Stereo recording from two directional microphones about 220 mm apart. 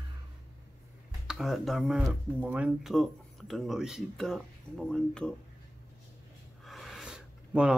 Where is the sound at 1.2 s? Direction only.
Centre (ahead or behind).